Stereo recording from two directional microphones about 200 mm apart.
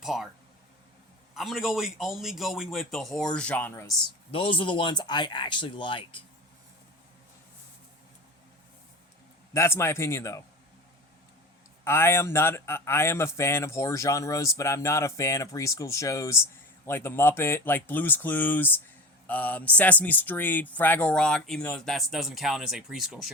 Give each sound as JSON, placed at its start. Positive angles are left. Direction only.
{"t": 0.0, "sound": "speech", "side_deg": 0}
{"t": 1.3, "sound": "speech", "side_deg": 0}
{"t": 4.3, "sound": "speech", "side_deg": 25}
{"t": 9.5, "sound": "speech", "side_deg": 15}
{"t": 11.9, "sound": "speech", "side_deg": 10}